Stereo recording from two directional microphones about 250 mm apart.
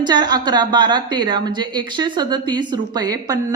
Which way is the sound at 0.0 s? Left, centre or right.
Centre.